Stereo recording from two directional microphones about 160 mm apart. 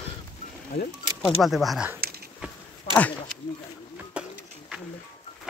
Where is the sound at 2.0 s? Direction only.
75° right (ahead or behind).